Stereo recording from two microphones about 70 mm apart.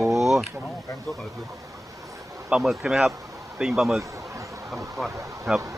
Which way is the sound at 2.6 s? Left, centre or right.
Centre.